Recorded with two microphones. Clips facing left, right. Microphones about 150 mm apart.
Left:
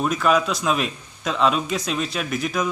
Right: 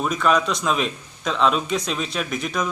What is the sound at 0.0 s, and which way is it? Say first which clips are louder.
A man's voice: left 1 dB; centre (ahead or behind).